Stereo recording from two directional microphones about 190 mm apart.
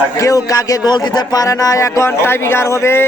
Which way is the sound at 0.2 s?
15° left (ahead or behind).